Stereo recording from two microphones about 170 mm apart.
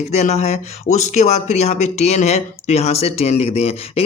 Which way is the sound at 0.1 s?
40° left (ahead or behind).